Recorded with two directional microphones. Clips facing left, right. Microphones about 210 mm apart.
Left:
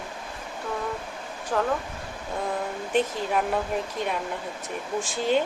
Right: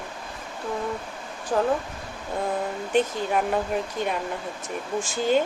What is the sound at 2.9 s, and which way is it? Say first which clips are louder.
Speech: right 2 dB; centre (ahead or behind).